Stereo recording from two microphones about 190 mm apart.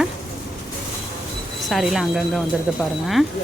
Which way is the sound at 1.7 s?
Centre (ahead or behind).